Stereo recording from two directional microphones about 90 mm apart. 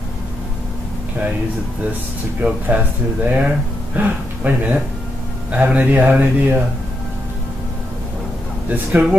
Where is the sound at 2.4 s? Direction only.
20° right (ahead or behind).